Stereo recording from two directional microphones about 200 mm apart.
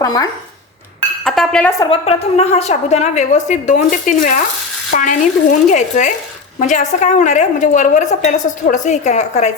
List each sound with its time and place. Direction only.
0.0 s speech: 20° left (ahead or behind)
1.2 s speech: 5° left (ahead or behind)
1.8 s a woman's voice: 30° left (ahead or behind)